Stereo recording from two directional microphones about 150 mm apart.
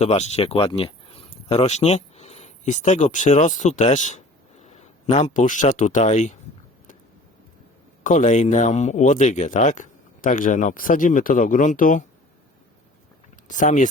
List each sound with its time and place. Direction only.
0.0 s speech: 45° left (ahead or behind)
8.0 s speech: 55° left (ahead or behind)
13.5 s speech: 55° left (ahead or behind)